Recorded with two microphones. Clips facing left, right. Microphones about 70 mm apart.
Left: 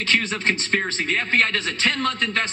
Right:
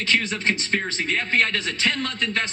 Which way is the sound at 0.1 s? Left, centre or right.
Left.